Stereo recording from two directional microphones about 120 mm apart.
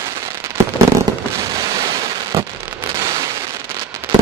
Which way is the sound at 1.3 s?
30° right (ahead or behind).